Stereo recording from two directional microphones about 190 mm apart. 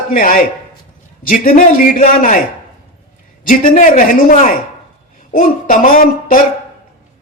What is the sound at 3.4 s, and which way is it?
Speech, 45° left (ahead or behind).